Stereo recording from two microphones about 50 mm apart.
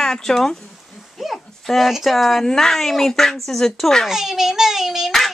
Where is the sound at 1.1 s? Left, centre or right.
Centre.